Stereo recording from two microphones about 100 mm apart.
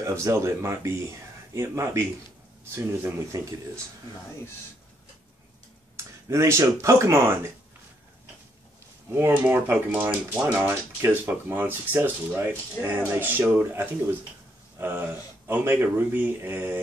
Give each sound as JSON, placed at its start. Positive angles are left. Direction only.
{"t": 0.0, "sound": "speech", "side_deg": -30}
{"t": 6.2, "sound": "speech", "side_deg": -30}
{"t": 9.1, "sound": "speech", "side_deg": -20}